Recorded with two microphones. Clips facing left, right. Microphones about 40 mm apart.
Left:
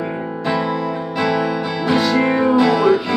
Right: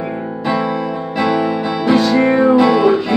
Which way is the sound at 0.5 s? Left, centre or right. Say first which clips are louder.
Right 2 dB; centre.